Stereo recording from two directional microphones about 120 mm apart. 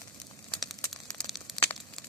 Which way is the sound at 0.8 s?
5° left (ahead or behind).